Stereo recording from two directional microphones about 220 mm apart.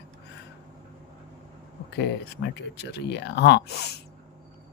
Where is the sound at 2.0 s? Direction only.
50° left (ahead or behind).